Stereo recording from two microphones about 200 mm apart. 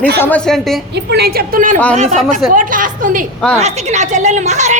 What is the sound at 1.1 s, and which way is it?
Speech, 45° right (ahead or behind).